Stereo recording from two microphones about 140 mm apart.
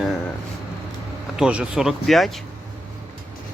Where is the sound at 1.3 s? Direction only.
5° right (ahead or behind).